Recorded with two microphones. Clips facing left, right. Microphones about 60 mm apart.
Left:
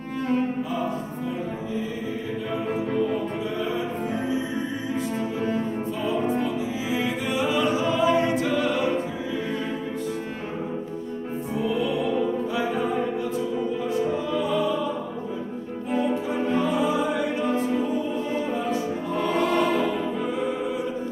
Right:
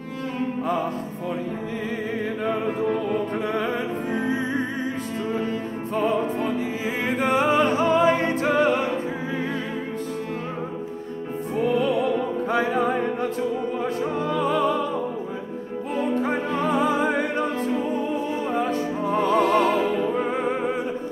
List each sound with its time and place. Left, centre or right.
5.9 s music: right
7.0 s singing: right
11.5 s opera: right
12.4 s music: right
13.8 s opera: right
16.2 s music: right